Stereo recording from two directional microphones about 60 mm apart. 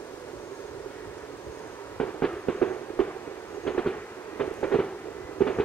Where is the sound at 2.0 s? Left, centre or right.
Left.